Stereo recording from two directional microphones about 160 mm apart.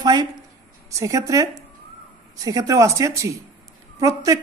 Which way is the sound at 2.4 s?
20° right (ahead or behind).